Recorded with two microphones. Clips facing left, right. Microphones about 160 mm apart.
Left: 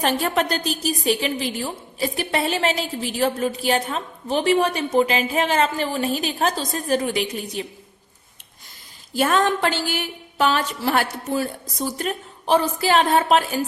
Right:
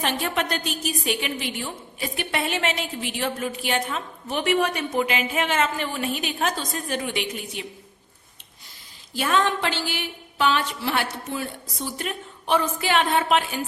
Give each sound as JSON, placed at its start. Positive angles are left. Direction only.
{"t": 0.0, "sound": "a woman's voice", "side_deg": 40}
{"t": 9.1, "sound": "a woman's voice", "side_deg": 45}